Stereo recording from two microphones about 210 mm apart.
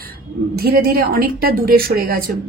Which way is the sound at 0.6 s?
45° right (ahead or behind).